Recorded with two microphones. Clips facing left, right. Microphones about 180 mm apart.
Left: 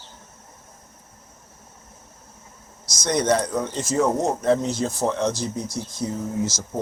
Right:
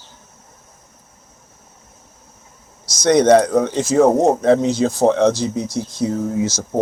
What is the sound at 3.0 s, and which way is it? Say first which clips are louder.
Speech: right 10 dB; 70° right (ahead or behind).